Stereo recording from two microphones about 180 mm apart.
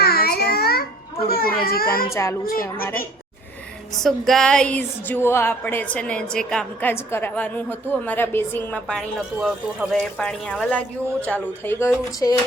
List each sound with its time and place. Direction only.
0.0 s a sound: 60° left (ahead or behind)
1.3 s baby cry: 55° left (ahead or behind)
2.5 s a child's voice: 55° left (ahead or behind)
4.0 s a woman's voice: centre (ahead or behind)